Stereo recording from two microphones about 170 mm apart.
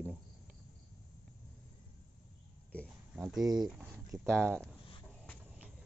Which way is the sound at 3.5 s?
5° right (ahead or behind).